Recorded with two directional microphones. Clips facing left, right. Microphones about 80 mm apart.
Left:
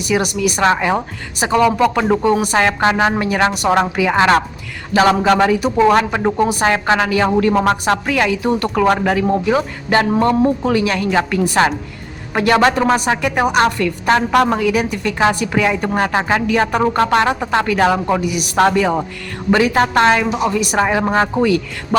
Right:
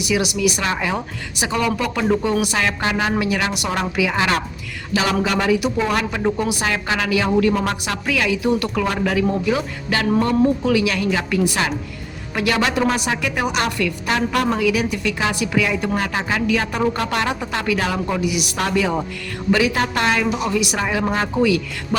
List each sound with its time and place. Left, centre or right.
0.0 s a woman's voice: left